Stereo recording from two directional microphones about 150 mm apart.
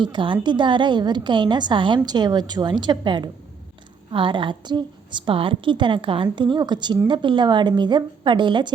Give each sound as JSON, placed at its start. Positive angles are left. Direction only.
{"t": 0.0, "sound": "a woman's voice", "side_deg": -35}